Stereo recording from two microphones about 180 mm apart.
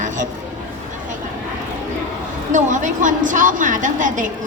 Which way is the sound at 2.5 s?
45° right (ahead or behind).